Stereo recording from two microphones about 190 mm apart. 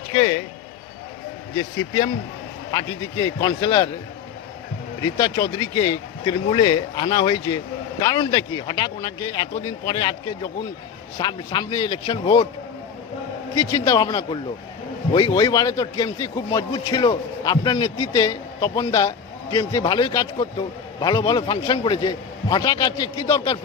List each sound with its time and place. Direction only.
0.1 s a man's voice: 25° left (ahead or behind)
1.8 s a man's voice: 20° left (ahead or behind)
5.0 s a man's voice: 20° left (ahead or behind)
13.6 s a man's voice: 20° left (ahead or behind)